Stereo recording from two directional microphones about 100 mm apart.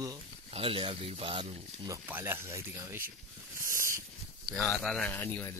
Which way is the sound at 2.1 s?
20° right (ahead or behind).